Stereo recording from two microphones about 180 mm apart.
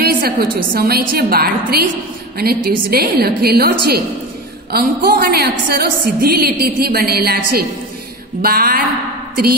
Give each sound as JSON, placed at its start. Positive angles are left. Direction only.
{"t": 0.0, "sound": "a woman's voice", "side_deg": -60}